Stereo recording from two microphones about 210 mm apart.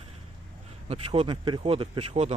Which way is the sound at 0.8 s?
30° right (ahead or behind).